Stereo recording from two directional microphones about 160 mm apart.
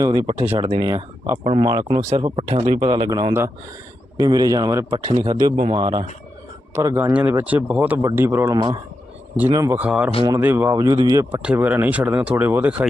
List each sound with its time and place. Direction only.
0.0 s speech: 25° right (ahead or behind)
6.7 s speech: 15° right (ahead or behind)
8.5 s speech: 25° right (ahead or behind)
9.7 s speech: 10° right (ahead or behind)
11.3 s speech: 10° right (ahead or behind)